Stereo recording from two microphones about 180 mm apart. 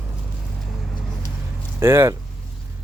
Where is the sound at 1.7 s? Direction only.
15° right (ahead or behind).